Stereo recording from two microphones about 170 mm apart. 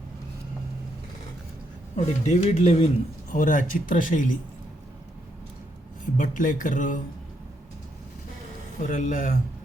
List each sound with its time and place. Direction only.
2.0 s speech: 40° left (ahead or behind)
3.3 s speech: 50° left (ahead or behind)
6.1 s speech: 50° left (ahead or behind)
8.9 s speech: 50° left (ahead or behind)